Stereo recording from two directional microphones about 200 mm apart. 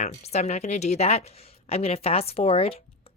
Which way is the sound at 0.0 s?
35° left (ahead or behind).